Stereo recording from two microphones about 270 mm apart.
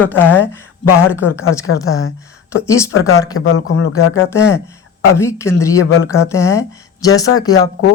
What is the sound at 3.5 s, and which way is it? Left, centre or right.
Speech, left.